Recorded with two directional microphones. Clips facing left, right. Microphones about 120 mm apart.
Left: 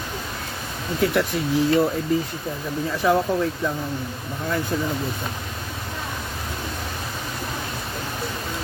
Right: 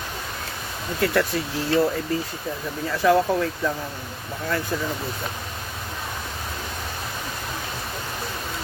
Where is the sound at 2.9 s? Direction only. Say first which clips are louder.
Right 2 dB; 15° left (ahead or behind).